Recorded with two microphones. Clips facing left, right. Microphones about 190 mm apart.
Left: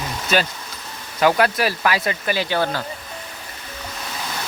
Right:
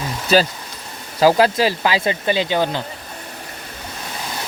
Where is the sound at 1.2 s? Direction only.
30° right (ahead or behind).